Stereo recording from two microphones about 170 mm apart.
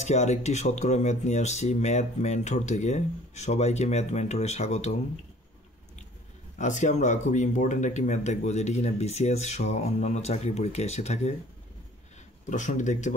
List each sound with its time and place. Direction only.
0.0 s speech: 40° left (ahead or behind)
6.6 s speech: 45° left (ahead or behind)
12.4 s speech: 45° left (ahead or behind)